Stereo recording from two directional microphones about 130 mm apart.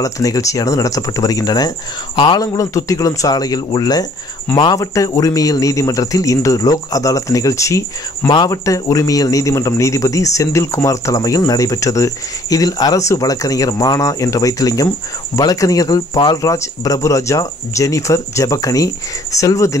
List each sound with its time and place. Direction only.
0.0 s a man's voice: 25° left (ahead or behind)